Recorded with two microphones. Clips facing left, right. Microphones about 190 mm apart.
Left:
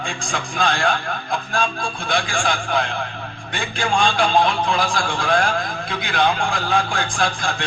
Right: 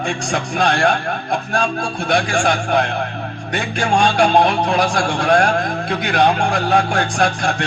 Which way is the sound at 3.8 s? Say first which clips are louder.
Right 3 dB; 40° right (ahead or behind).